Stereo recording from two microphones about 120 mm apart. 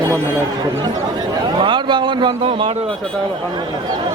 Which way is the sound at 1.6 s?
40° right (ahead or behind).